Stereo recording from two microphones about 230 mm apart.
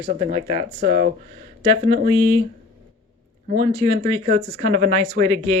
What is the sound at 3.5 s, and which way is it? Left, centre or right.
Speech, right.